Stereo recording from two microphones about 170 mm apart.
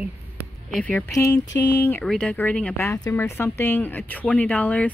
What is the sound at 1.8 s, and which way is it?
Speech, 10° left (ahead or behind).